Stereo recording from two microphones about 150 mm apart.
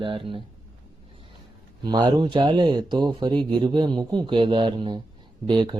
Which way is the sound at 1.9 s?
30° right (ahead or behind).